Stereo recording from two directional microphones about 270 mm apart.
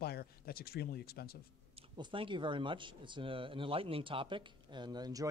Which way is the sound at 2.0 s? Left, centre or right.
Centre.